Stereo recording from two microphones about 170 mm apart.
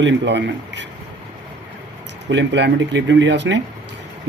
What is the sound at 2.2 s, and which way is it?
Speech, 90° right.